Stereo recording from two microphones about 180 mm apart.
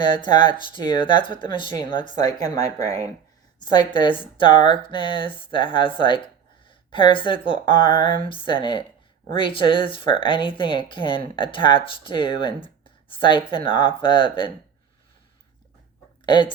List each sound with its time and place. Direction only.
0.0 s speech: 25° left (ahead or behind)
16.2 s speech: 25° left (ahead or behind)